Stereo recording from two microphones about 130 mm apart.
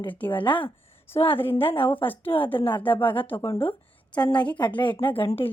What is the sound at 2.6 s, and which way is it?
Speech, 40° left (ahead or behind).